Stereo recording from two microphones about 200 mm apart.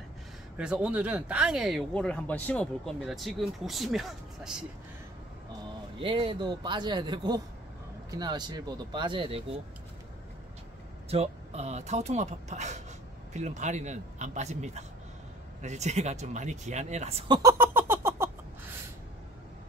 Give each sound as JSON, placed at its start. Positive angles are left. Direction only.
{"t": 0.6, "sound": "speech", "side_deg": -5}
{"t": 5.9, "sound": "speech", "side_deg": -25}
{"t": 11.1, "sound": "speech", "side_deg": -30}
{"t": 17.3, "sound": "a sound", "side_deg": -15}